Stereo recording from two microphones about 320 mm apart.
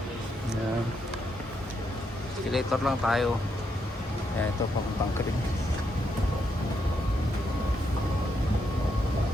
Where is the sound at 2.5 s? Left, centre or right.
Centre.